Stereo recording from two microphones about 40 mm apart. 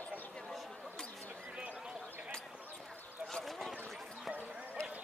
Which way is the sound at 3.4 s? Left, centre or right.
Centre.